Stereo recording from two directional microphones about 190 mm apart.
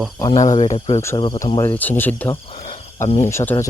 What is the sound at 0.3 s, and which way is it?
Speech, 40° left (ahead or behind).